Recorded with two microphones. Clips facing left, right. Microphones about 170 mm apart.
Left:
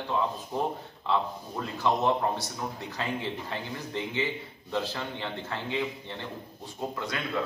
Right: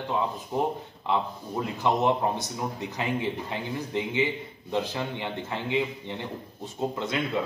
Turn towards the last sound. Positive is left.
turn(degrees=-20)  # may be behind; listen again after turning